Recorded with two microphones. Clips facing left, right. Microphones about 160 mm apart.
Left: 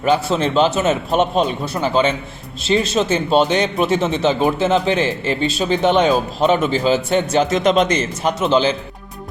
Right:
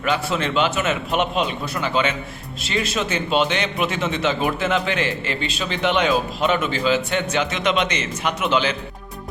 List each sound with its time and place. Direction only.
0.0 s speech: 30° left (ahead or behind)